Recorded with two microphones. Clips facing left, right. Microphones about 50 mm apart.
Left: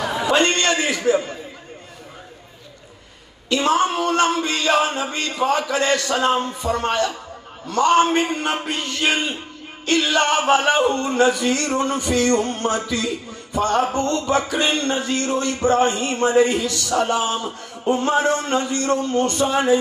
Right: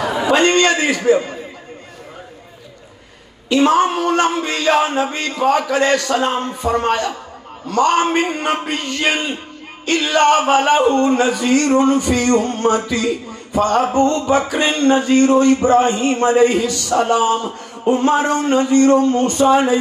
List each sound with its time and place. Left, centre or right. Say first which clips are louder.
0.0 s a sound: right 3 dB; centre
0.6 s speech: right 5 dB; centre
3.4 s speech: right 5 dB; centre